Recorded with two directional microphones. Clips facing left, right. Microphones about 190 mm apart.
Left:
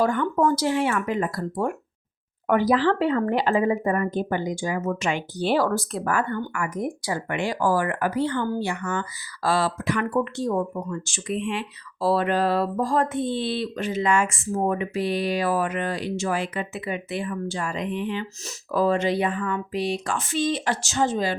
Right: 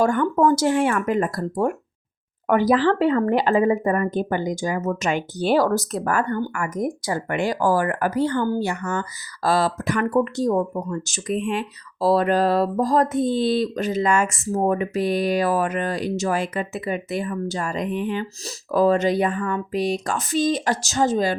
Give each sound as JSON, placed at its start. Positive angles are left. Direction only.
{"t": 0.0, "sound": "speech", "side_deg": -45}